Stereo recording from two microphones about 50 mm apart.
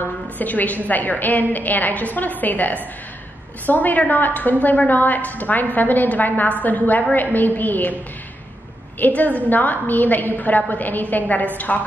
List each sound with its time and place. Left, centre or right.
0.4 s a woman's voice: left
9.0 s a woman's voice: left